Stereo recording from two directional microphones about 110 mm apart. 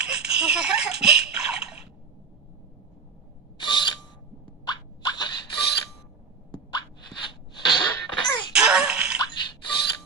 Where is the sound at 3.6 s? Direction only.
45° left (ahead or behind).